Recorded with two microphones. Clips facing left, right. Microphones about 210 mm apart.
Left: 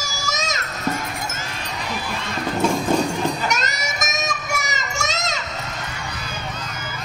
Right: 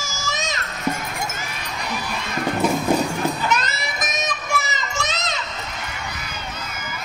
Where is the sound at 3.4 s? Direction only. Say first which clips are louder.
Right 1 dB; 45° left (ahead or behind).